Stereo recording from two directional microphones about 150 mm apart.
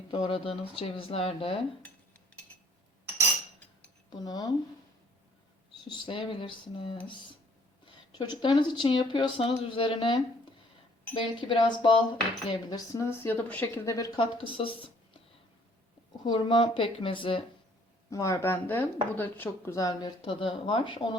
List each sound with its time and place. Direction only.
0.1 s speech: 35° left (ahead or behind)
4.1 s speech: 25° left (ahead or behind)
5.9 s speech: 35° left (ahead or behind)
8.2 s speech: 30° left (ahead or behind)
12.5 s speech: 25° left (ahead or behind)
13.9 s speech: 20° left (ahead or behind)
14.4 s speech: 35° left (ahead or behind)
16.2 s speech: 30° left (ahead or behind)
18.1 s speech: 20° left (ahead or behind)